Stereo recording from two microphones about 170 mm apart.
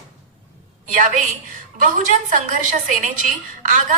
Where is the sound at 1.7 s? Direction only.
50° right (ahead or behind).